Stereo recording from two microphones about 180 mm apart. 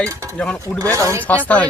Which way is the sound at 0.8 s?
15° right (ahead or behind).